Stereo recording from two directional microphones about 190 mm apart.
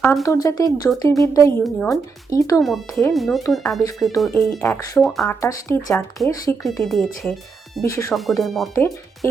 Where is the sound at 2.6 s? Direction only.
Centre (ahead or behind).